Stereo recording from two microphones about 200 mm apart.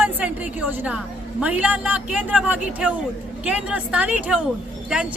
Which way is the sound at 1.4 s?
5° right (ahead or behind).